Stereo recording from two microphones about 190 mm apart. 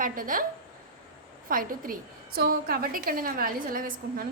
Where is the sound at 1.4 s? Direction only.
50° right (ahead or behind).